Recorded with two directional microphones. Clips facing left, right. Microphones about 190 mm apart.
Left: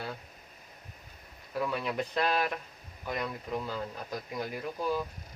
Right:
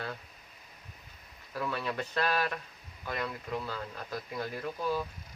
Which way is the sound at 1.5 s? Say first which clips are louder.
Left 2 dB; 15° left (ahead or behind).